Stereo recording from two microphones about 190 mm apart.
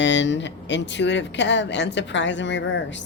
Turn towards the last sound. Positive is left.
turn(degrees=70)  # may be behind; listen again after turning